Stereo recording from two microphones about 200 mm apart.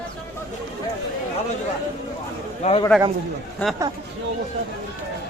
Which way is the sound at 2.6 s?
35° left (ahead or behind).